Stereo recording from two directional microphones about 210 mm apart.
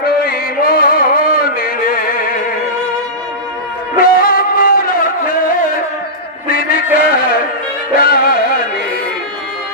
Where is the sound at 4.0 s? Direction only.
45° left (ahead or behind).